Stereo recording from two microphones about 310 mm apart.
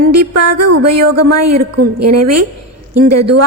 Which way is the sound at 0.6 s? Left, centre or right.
Right.